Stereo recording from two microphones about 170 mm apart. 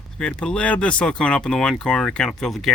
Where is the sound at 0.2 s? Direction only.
5° left (ahead or behind).